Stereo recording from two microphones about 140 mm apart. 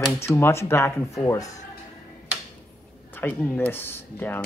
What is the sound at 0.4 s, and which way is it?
Speech, 20° left (ahead or behind).